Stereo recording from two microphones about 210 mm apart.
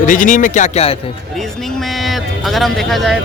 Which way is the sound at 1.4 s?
Centre (ahead or behind).